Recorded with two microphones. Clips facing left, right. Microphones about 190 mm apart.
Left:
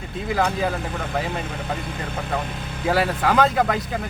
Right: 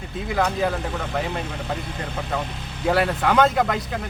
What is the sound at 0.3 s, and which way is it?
Speech, centre (ahead or behind).